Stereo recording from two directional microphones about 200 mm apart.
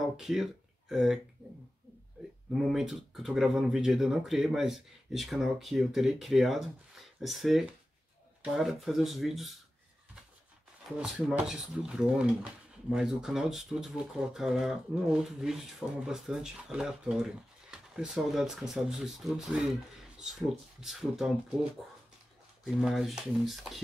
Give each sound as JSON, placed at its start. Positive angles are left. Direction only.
{"t": 0.0, "sound": "speech", "side_deg": 0}
{"t": 2.2, "sound": "a sound", "side_deg": 0}
{"t": 2.5, "sound": "speech", "side_deg": 0}
{"t": 11.0, "sound": "speech", "side_deg": -5}
{"t": 22.8, "sound": "speech", "side_deg": 0}